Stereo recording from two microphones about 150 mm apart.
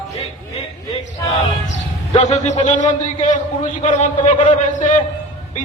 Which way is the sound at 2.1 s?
55° left (ahead or behind).